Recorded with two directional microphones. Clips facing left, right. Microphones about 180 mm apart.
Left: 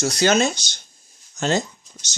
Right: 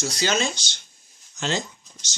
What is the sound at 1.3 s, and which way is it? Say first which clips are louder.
Speech: left 6 dB; 40° left (ahead or behind).